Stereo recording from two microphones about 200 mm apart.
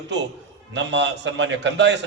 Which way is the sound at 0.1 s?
60° right (ahead or behind).